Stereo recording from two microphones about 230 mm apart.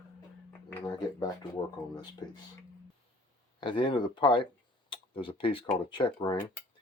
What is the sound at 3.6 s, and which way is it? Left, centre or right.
Speech, left.